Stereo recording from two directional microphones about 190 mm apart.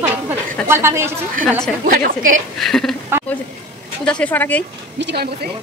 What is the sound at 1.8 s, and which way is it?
Speech, 50° right (ahead or behind).